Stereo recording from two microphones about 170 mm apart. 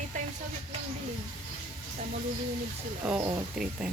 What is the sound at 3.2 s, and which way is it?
Speech, 20° right (ahead or behind).